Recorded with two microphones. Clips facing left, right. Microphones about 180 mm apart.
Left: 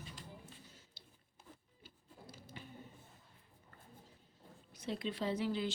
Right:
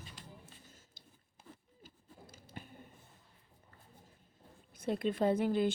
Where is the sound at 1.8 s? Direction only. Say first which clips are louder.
Even; 50° right (ahead or behind).